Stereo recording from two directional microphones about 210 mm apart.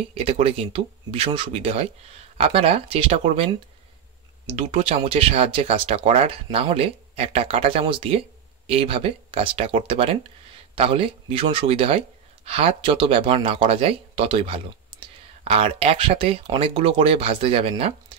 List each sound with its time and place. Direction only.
0.1 s speech: 25° right (ahead or behind)
4.6 s speech: 30° right (ahead or behind)